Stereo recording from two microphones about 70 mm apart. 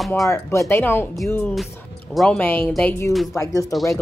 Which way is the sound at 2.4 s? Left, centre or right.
Left.